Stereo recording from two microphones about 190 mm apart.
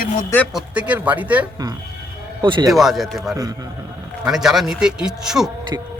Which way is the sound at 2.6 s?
Centre (ahead or behind).